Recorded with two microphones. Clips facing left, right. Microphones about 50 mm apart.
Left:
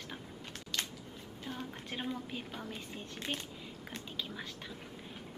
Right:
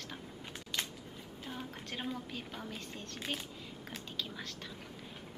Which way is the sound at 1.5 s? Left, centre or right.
Centre.